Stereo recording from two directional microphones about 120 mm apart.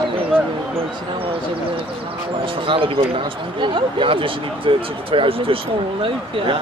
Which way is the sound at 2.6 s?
45° right (ahead or behind).